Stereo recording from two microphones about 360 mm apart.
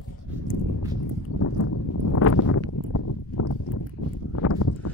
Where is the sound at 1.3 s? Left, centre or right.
Left.